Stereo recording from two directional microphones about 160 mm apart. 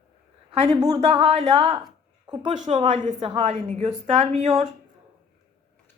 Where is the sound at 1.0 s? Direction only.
40° right (ahead or behind).